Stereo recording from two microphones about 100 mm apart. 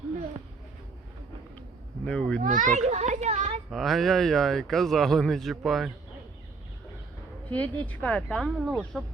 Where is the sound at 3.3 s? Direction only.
90° right.